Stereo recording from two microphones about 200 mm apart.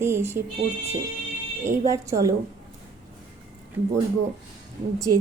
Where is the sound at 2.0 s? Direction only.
15° right (ahead or behind).